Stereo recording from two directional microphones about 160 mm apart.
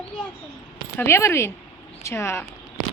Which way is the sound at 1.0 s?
15° left (ahead or behind).